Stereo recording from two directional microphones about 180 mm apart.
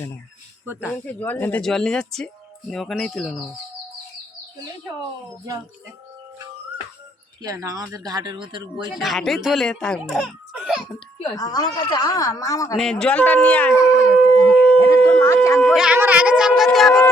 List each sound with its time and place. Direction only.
0.6 s speech: 10° right (ahead or behind)
0.9 s speech: 10° left (ahead or behind)
7.4 s speech: 20° right (ahead or behind)
9.0 s speech: centre (ahead or behind)
11.3 s a woman's voice: 20° left (ahead or behind)
12.7 s speech: 5° left (ahead or behind)
14.8 s a sound: 15° left (ahead or behind)
15.7 s speech: 5° right (ahead or behind)
16.7 s music: centre (ahead or behind)